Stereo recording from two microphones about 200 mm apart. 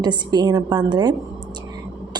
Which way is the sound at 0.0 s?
20° right (ahead or behind).